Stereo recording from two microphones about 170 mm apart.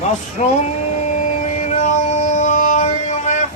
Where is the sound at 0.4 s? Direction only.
40° left (ahead or behind).